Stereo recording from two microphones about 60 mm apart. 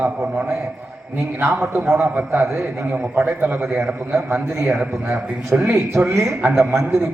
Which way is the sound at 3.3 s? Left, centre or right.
Right.